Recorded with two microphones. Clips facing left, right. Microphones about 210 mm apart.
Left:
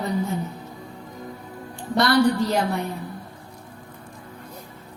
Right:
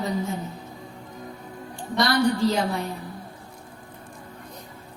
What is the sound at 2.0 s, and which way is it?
Speech, 60° left (ahead or behind).